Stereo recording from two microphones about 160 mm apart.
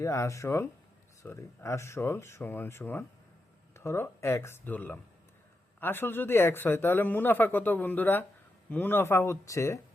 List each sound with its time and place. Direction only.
0.0 s speech: 20° left (ahead or behind)